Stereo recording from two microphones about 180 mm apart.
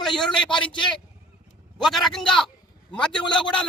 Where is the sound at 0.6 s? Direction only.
25° left (ahead or behind).